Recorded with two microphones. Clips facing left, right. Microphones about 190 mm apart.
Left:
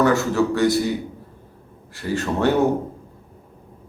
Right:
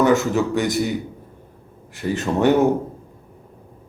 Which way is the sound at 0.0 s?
20° right (ahead or behind).